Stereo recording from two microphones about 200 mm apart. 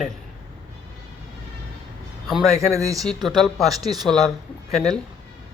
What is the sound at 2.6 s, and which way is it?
Speech, 15° right (ahead or behind).